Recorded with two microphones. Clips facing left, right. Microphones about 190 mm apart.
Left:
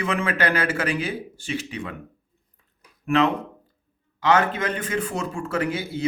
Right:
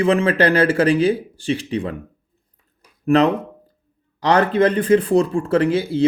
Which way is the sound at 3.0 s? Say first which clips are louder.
Right 5 dB; 40° right (ahead or behind).